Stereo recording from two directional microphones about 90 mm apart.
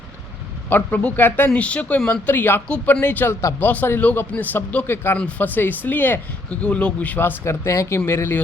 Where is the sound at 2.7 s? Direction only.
10° left (ahead or behind).